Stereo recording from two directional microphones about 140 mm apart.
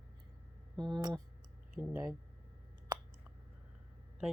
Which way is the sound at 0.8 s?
30° right (ahead or behind).